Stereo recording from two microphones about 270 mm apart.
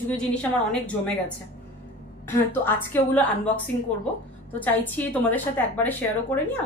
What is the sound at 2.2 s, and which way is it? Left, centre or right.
A woman's voice, centre.